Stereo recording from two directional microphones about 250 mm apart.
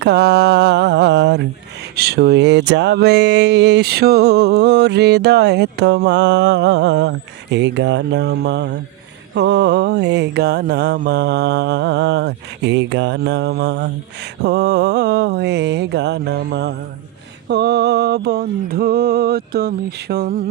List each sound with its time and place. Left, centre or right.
0.0 s mantra: right
2.0 s music: right
9.3 s mantra: right